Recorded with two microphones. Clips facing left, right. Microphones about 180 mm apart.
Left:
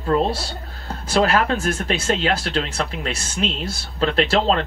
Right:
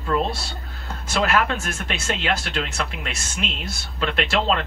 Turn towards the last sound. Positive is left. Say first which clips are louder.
# left 4 dB
turn(degrees=35)  # may be behind; listen again after turning